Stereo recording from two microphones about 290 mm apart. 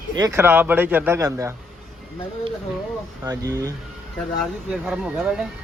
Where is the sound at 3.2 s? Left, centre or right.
Centre.